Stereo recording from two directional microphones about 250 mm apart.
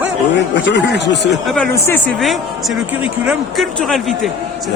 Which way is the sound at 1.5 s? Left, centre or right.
Centre.